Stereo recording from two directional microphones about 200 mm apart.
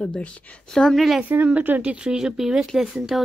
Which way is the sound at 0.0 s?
5° left (ahead or behind).